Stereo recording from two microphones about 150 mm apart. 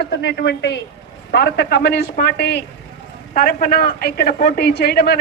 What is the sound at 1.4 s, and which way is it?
Speech, 90° left.